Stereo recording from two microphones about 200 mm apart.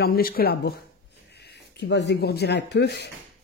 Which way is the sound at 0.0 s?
50° left (ahead or behind).